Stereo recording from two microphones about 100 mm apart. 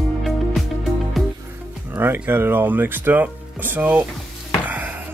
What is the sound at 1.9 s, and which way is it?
Speech, 20° right (ahead or behind).